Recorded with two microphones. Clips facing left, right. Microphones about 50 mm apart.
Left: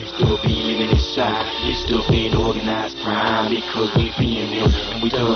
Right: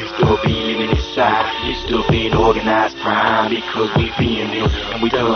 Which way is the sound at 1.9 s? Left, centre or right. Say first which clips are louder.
Right 3 dB; right.